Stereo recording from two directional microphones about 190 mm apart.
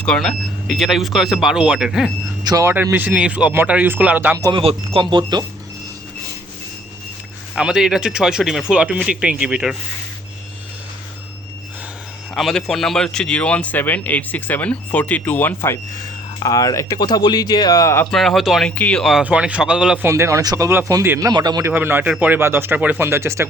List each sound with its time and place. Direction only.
0.0 s speech: 5° left (ahead or behind)
2.4 s speech: 20° right (ahead or behind)
4.4 s speech: 20° right (ahead or behind)
7.5 s speech: 5° right (ahead or behind)
12.3 s speech: centre (ahead or behind); by 18.1 s 15° left (ahead or behind)
18.1 s speech: centre (ahead or behind); by 21.7 s 20° right (ahead or behind)
21.7 s speech: 10° right (ahead or behind)